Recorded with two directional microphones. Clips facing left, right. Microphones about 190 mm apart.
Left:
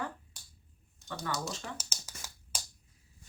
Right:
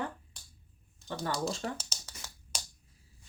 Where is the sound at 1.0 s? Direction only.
30° right (ahead or behind).